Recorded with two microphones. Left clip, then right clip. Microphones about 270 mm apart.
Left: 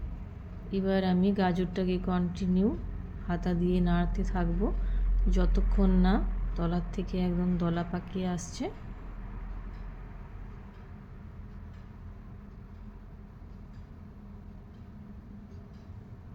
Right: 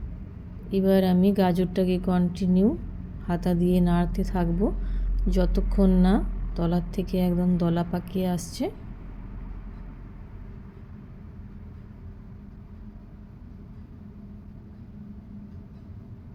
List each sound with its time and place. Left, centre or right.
0.7 s a woman's voice: right